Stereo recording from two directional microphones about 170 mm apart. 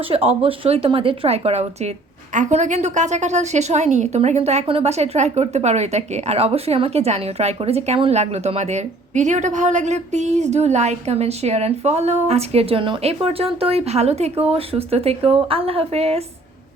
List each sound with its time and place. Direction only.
0.1 s a woman's voice: 35° right (ahead or behind)